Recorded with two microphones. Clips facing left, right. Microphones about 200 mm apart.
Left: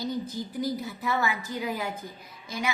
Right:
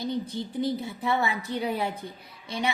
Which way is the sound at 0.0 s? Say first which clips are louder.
Right 1 dB; 30° right (ahead or behind).